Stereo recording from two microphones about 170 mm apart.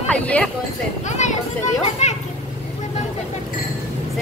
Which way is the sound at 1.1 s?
45° left (ahead or behind).